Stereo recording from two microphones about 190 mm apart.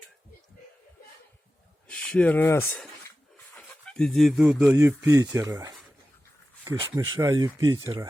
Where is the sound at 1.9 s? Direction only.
5° left (ahead or behind); by 5.7 s 20° right (ahead or behind).